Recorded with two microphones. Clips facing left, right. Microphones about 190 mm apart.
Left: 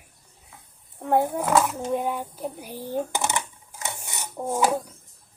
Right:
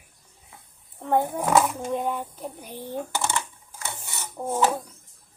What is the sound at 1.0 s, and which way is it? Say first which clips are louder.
Roaring cats: left 1 dB; 5° left (ahead or behind).